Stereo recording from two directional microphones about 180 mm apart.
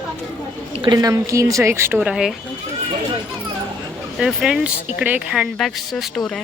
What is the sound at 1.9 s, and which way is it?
Speech, 5° right (ahead or behind).